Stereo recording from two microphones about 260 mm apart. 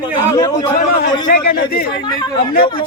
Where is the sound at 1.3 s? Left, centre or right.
Left.